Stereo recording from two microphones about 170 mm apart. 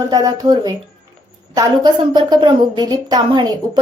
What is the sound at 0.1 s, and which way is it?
A woman's voice, 20° right (ahead or behind).